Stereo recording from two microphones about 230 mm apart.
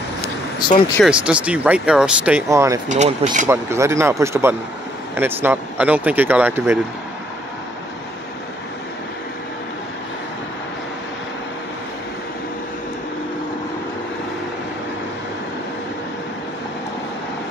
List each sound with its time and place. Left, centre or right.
1.0 s speech: centre
2.9 s speech: right
3.4 s speech: centre